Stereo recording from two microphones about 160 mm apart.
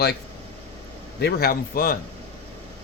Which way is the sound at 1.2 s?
70° left (ahead or behind).